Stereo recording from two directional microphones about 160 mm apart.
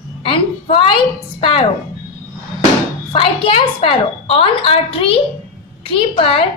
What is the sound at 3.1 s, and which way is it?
Speech, 35° left (ahead or behind).